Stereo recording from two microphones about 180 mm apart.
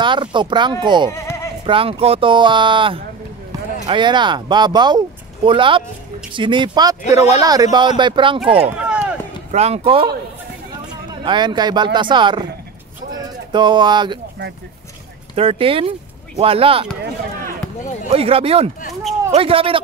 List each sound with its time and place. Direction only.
0.0 s speech: 25° right (ahead or behind)
8.7 s run: 5° right (ahead or behind)
9.5 s speech: 35° right (ahead or behind)
11.2 s speech: 25° right (ahead or behind)
13.1 s a sound: 25° right (ahead or behind)
15.3 s speech: 30° right (ahead or behind)
18.1 s speech: 30° right (ahead or behind)